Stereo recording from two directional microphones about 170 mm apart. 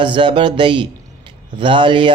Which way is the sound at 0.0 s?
30° right (ahead or behind).